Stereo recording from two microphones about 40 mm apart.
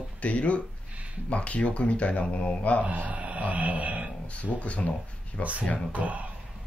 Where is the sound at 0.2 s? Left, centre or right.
Left.